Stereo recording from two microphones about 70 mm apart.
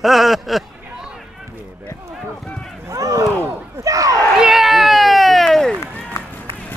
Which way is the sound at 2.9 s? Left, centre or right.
Right.